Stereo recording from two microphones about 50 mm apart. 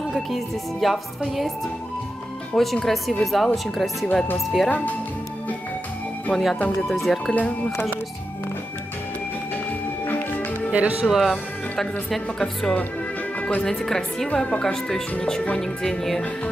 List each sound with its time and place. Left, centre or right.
0.1 s speech: centre
2.5 s speech: centre
4.6 s speech: left
6.3 s speech: centre
7.3 s speech: left
10.0 s music: left
10.7 s speech: right
11.1 s speech: centre
11.7 s speech: centre